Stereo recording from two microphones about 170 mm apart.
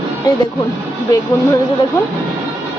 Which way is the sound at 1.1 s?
20° left (ahead or behind).